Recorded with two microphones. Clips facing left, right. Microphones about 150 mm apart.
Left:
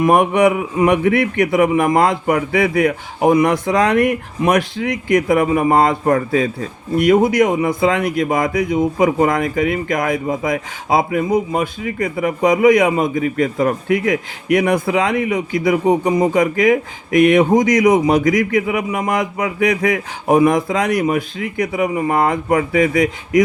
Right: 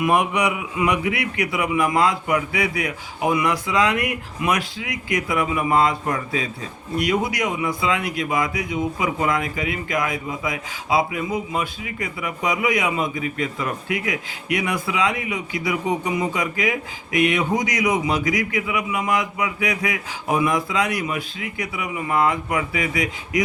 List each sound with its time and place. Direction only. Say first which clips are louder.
0.0 s speech: left 7 dB; 50° left (ahead or behind)